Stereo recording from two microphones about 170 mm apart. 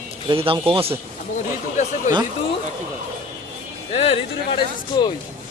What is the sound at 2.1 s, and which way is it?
Speech, 45° left (ahead or behind).